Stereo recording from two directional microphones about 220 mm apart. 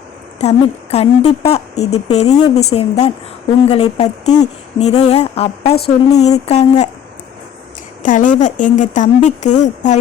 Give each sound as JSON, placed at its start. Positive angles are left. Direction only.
{"t": 0.3, "sound": "speech", "side_deg": 30}
{"t": 8.0, "sound": "speech", "side_deg": 35}